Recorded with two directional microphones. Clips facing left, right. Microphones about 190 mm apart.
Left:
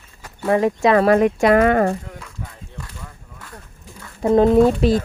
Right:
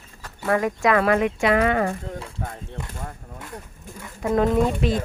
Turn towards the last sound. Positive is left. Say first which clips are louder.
# left 7 dB
turn(degrees=35)  # may be behind; listen again after turning